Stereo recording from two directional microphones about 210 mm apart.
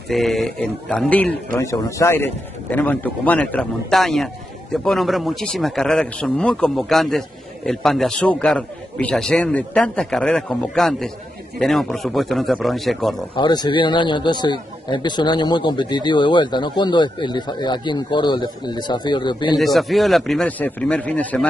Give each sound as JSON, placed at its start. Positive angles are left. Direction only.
{"t": 0.1, "sound": "a man's voice", "side_deg": 0}
{"t": 13.3, "sound": "a man's voice", "side_deg": 20}
{"t": 19.6, "sound": "a man's voice", "side_deg": 0}